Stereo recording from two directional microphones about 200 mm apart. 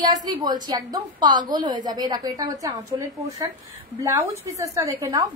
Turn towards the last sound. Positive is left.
turn(degrees=-15)  # may be behind; listen again after turning